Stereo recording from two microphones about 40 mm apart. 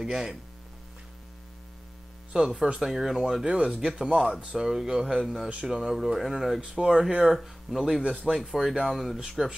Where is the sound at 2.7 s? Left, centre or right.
Centre.